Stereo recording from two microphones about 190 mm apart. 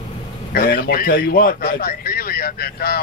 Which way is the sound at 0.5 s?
50° left (ahead or behind).